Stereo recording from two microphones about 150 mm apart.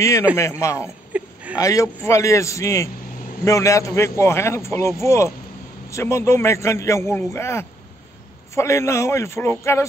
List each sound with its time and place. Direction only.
0.4 s a man's voice: 20° left (ahead or behind)
0.8 s a sound: 10° right (ahead or behind)
1.6 s a man's voice: 20° left (ahead or behind)